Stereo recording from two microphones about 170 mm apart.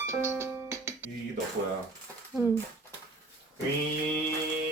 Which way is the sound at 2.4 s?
15° right (ahead or behind).